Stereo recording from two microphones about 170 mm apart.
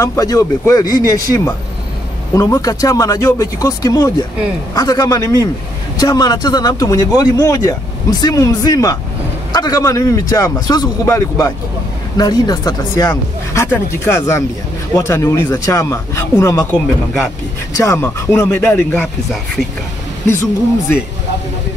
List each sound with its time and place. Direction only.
0.0 s speech: 20° left (ahead or behind)